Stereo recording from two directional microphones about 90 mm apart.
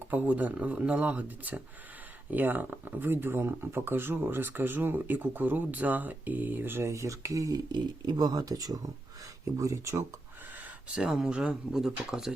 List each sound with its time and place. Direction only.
0.1 s speech: 20° right (ahead or behind)
10.8 s speech: 10° right (ahead or behind)